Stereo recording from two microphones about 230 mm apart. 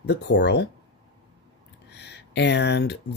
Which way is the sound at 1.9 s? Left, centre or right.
Left.